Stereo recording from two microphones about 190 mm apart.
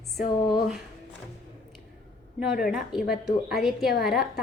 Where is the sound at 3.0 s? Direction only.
55° left (ahead or behind).